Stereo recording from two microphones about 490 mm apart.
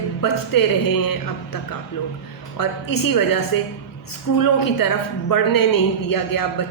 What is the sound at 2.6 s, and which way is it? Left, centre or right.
Speech, left.